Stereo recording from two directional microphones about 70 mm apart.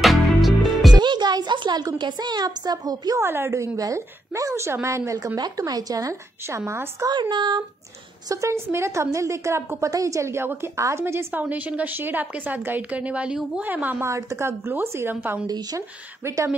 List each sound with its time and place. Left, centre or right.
0.0 s music: centre
0.9 s a woman's voice: right
3.2 s a woman's voice: right
5.6 s speech: right
6.4 s a woman's voice: right
7.1 s speech: right
8.3 s a woman's voice: right
11.4 s speech: right
14.0 s a woman's voice: right
15.4 s speech: right
16.2 s speech: right